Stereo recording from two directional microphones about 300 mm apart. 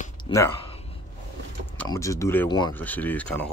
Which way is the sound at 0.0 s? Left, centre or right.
Centre.